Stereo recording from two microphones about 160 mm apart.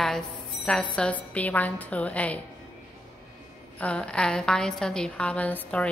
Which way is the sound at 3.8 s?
5° left (ahead or behind).